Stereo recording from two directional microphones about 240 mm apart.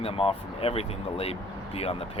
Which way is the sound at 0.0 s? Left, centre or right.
Left.